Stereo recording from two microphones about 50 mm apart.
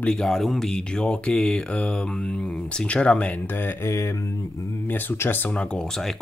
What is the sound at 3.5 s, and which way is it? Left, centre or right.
Speech, left.